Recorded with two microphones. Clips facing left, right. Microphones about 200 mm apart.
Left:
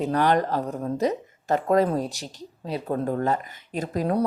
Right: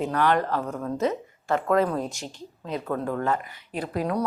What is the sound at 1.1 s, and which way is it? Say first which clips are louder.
A woman's voice: left 2 dB; 40° left (ahead or behind).